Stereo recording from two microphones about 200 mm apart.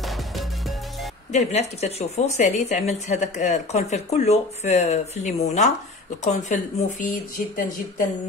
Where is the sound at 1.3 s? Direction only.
35° left (ahead or behind).